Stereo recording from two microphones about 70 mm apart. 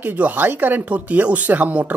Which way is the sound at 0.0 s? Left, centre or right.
Right.